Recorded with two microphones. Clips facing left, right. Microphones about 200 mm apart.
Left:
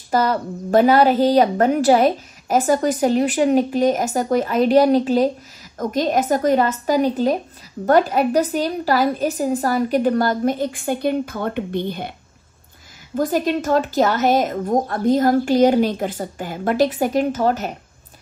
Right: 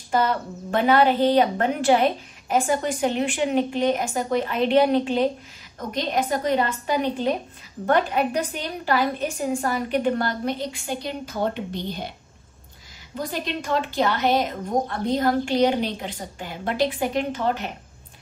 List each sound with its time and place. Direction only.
0.1 s a woman's voice: 40° left (ahead or behind); by 12.1 s 55° left (ahead or behind)
13.1 s a woman's voice: 45° left (ahead or behind)